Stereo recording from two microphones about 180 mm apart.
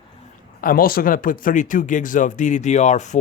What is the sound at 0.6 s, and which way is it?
Speech, 55° left (ahead or behind).